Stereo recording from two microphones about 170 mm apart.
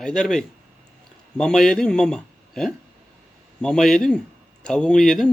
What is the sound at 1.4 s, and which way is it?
Speech, 5° left (ahead or behind).